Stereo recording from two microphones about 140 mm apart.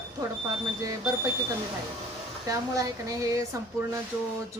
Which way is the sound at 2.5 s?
25° right (ahead or behind).